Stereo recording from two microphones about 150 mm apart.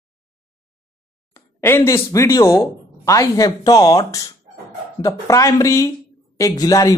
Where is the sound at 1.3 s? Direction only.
15° left (ahead or behind).